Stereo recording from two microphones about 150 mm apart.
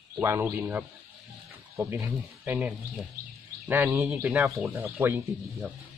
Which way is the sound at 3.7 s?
15° right (ahead or behind).